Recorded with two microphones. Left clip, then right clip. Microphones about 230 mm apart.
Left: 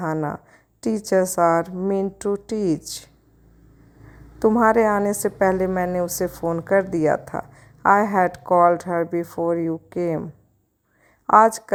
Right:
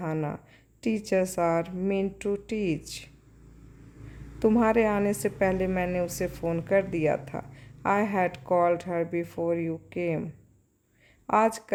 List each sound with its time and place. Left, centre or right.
0.0 s speech: centre
1.4 s speech: centre
1.6 s speech: centre
4.4 s a woman's voice: centre
8.9 s a woman's voice: centre
9.2 s speech: centre
11.3 s speech: centre